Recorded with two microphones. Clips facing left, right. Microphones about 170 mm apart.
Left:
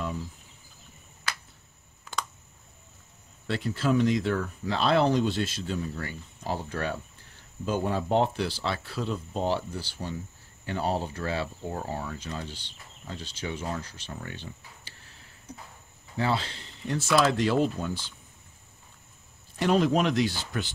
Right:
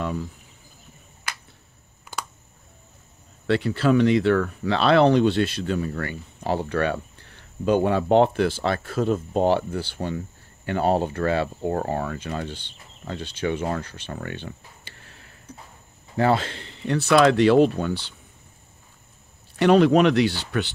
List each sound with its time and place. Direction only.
3.4 s speech: 70° right (ahead or behind)
16.2 s speech: 55° right (ahead or behind); by 18.1 s 70° right (ahead or behind)
19.6 s speech: 70° right (ahead or behind)